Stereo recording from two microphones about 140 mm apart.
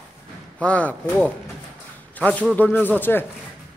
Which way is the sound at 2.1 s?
10° left (ahead or behind).